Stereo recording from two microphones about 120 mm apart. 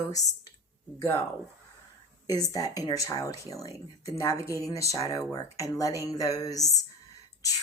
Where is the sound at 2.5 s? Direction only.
30° left (ahead or behind).